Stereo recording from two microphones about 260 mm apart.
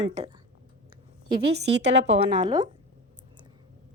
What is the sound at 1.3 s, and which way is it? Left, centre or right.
Speech, right.